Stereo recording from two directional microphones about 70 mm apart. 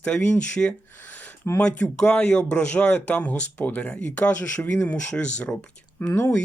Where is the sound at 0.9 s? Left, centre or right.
Left.